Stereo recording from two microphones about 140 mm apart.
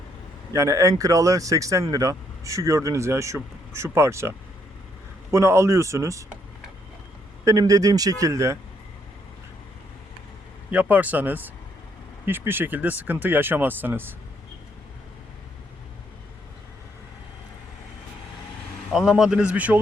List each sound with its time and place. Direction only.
0.5 s speech: 20° right (ahead or behind)
7.4 s speech: 25° right (ahead or behind)
10.7 s speech: 10° right (ahead or behind)
18.9 s speech: 5° right (ahead or behind)